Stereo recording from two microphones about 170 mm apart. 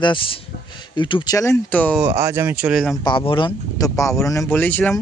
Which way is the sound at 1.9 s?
15° right (ahead or behind).